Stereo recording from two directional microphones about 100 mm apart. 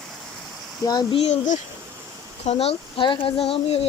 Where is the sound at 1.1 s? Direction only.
90° left.